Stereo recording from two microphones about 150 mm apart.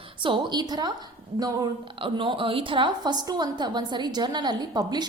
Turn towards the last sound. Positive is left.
turn(degrees=-30)  # may be behind; listen again after turning